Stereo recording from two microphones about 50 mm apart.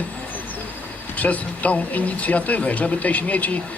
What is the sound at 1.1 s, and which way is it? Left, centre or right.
A man's voice, left.